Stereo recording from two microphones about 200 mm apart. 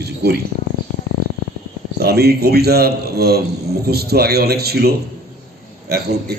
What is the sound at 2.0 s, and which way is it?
A man's voice, 55° right (ahead or behind).